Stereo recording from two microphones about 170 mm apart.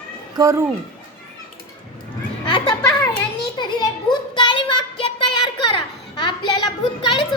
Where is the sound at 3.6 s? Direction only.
25° left (ahead or behind).